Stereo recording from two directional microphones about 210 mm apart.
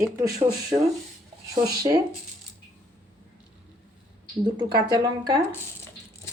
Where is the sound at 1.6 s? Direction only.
20° right (ahead or behind).